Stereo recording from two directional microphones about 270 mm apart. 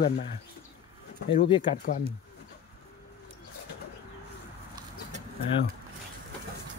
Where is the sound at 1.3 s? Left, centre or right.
Centre.